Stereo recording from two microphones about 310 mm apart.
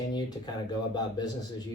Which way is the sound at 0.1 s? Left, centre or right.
Centre.